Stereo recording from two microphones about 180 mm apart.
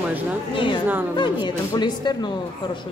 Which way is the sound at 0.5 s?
25° left (ahead or behind).